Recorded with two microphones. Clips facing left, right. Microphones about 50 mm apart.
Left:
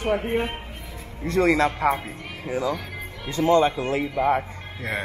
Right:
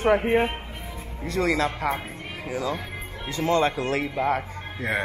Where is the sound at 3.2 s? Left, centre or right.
Left.